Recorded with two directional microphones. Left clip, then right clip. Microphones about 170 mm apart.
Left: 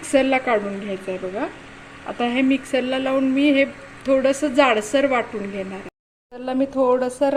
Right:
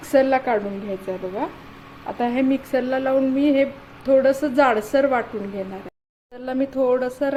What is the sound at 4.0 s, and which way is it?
A woman's voice, 10° left (ahead or behind).